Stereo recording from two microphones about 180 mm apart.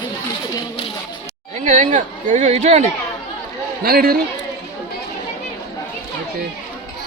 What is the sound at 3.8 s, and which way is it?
Speech, 55° right (ahead or behind).